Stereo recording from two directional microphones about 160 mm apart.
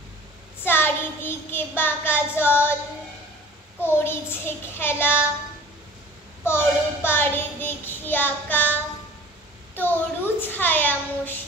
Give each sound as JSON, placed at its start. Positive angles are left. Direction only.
{"t": 0.7, "sound": "child singing", "side_deg": 15}
{"t": 3.8, "sound": "a woman's voice", "side_deg": 15}
{"t": 6.4, "sound": "child singing", "side_deg": 15}
{"t": 9.8, "sound": "a woman's voice", "side_deg": 10}